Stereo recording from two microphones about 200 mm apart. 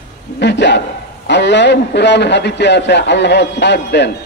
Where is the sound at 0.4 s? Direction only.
60° left (ahead or behind).